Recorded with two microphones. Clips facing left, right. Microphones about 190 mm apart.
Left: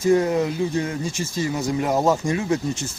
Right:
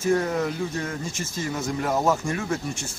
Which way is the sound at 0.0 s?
20° left (ahead or behind).